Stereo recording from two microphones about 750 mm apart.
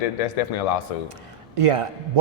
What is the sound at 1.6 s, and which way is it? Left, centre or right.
Speech, right.